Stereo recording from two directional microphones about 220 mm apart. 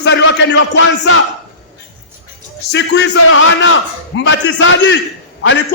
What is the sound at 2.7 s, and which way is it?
A man's voice, 55° left (ahead or behind).